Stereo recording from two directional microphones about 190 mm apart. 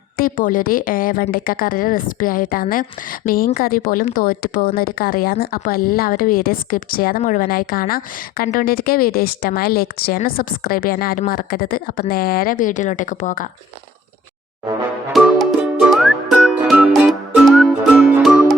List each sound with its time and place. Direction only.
0.2 s speech: 45° left (ahead or behind)
15.1 s music: centre (ahead or behind)